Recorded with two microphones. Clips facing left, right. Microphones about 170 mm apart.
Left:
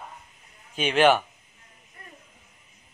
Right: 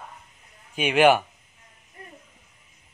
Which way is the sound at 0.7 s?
10° right (ahead or behind).